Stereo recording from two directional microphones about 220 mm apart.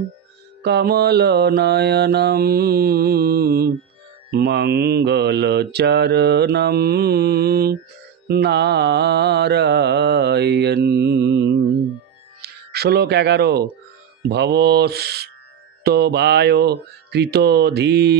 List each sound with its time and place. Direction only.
0.6 s mantra: 45° right (ahead or behind)
12.4 s speech: 45° right (ahead or behind)
14.3 s mantra: 50° right (ahead or behind)